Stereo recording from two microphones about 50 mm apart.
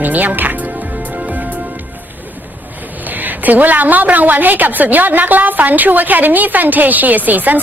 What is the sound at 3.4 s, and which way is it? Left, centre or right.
Music, right.